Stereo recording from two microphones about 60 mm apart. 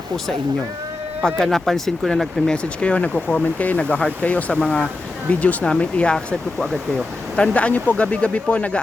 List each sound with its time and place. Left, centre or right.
1.4 s speech: centre
2.8 s speech: left